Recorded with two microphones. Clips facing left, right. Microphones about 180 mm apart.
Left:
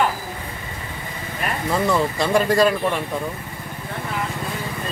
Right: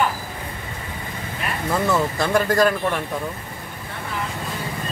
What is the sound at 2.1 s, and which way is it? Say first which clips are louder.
Speech: left 1 dB; 15° left (ahead or behind).